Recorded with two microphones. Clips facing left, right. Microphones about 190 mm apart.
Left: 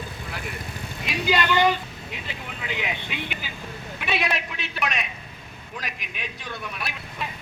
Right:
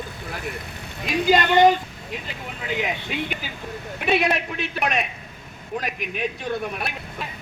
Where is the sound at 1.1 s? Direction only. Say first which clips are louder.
Right 5 dB; 45° right (ahead or behind).